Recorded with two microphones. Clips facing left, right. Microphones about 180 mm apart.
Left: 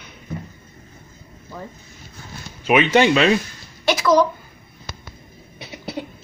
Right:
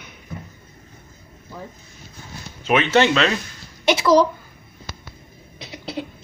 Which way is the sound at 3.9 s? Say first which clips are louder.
Right 1 dB; 30° right (ahead or behind).